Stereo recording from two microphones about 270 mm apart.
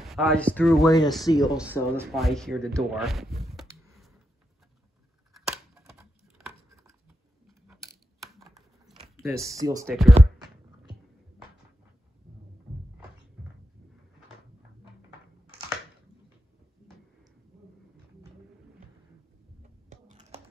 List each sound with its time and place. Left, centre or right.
0.0 s speech: centre
0.8 s speech: centre
2.0 s speech: centre
5.3 s a sound: centre
8.2 s computer keyboard: centre
9.2 s speech: centre
9.5 s speech: centre
9.8 s speech: centre